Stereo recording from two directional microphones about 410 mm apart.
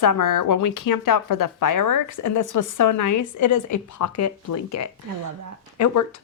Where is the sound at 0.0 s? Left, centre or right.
Left.